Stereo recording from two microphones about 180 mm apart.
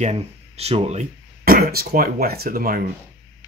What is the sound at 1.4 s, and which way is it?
Speech, 55° right (ahead or behind).